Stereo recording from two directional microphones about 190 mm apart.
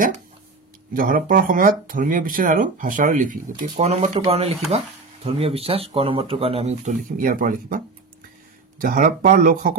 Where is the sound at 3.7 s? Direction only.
35° right (ahead or behind).